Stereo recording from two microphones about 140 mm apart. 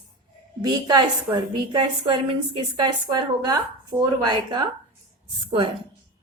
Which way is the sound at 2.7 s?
30° right (ahead or behind).